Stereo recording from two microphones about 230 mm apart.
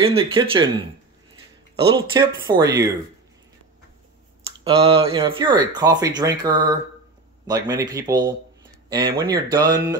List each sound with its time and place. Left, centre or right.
0.0 s speech: right
1.8 s speech: centre
4.6 s speech: right